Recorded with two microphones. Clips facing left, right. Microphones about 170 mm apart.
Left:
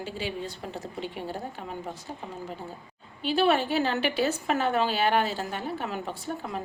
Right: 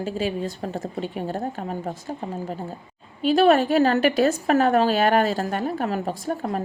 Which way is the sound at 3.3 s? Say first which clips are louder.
Right 7 dB; 45° right (ahead or behind).